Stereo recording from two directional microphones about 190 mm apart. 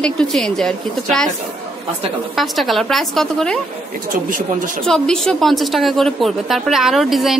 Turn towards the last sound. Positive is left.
turn(degrees=0)  # may be behind; listen again after turning